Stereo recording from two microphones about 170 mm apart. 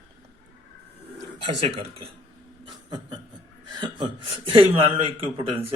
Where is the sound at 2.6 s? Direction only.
25° right (ahead or behind).